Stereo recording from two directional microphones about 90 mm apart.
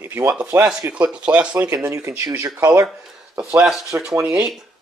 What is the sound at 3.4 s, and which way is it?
Speech, 10° right (ahead or behind).